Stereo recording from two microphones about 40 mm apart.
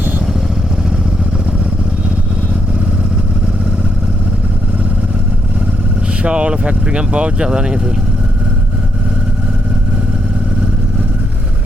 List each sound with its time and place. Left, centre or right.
6.2 s speech: right